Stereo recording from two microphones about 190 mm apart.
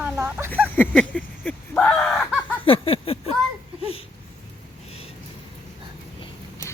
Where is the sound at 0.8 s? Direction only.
5° left (ahead or behind).